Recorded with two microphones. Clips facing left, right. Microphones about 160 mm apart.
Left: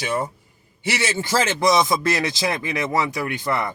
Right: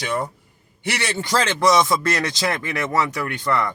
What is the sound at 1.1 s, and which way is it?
Speech, 5° left (ahead or behind).